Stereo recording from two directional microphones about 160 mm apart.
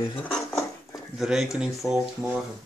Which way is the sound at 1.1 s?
Centre (ahead or behind).